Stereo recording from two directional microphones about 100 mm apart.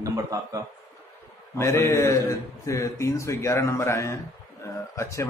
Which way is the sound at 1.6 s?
30° left (ahead or behind).